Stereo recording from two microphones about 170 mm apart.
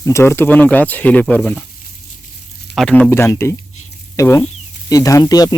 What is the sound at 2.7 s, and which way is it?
Speech, 5° left (ahead or behind).